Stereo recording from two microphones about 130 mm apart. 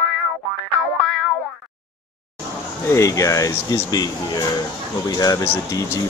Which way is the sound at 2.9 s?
25° left (ahead or behind).